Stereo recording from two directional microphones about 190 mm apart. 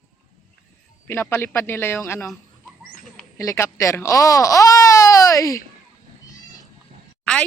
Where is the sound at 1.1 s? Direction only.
10° left (ahead or behind).